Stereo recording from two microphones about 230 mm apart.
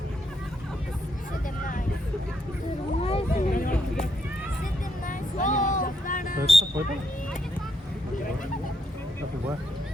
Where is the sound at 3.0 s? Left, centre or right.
Left.